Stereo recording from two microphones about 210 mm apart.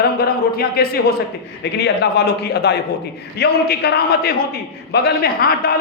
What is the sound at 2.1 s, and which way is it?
A man's voice, 50° left (ahead or behind).